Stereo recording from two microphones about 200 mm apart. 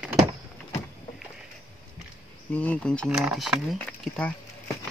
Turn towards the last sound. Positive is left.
turn(degrees=5)  # may be behind; listen again after turning